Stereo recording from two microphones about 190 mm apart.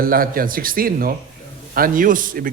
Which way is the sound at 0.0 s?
50° right (ahead or behind).